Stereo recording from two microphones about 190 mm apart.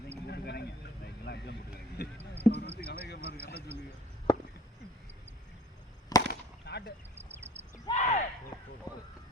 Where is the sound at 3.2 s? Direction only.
35° right (ahead or behind).